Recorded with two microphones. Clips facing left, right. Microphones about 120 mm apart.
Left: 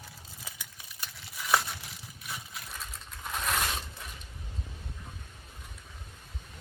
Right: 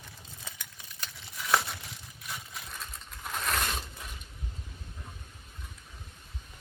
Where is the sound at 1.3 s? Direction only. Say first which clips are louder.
Even; centre (ahead or behind).